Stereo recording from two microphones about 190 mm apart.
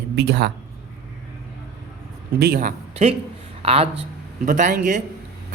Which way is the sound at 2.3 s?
60° right (ahead or behind).